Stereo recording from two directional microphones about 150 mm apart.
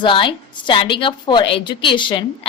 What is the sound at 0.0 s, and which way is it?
A woman's voice, 35° left (ahead or behind).